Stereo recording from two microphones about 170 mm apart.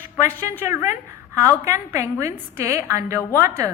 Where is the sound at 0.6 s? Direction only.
10° right (ahead or behind).